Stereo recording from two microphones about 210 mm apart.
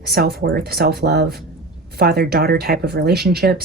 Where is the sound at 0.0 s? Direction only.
50° right (ahead or behind).